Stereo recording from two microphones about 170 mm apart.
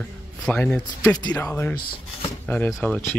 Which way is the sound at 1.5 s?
10° left (ahead or behind).